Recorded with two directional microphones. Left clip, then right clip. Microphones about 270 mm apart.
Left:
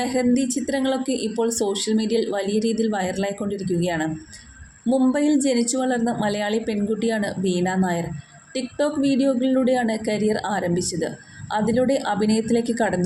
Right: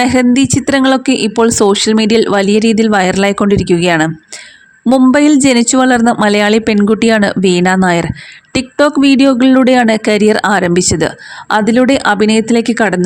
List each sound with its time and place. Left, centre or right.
0.0 s speech: right